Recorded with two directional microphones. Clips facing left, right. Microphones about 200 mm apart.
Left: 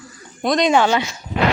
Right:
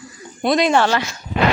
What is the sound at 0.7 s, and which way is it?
Speech, 15° left (ahead or behind).